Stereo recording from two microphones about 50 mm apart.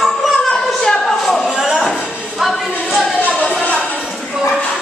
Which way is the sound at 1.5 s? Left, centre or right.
Centre.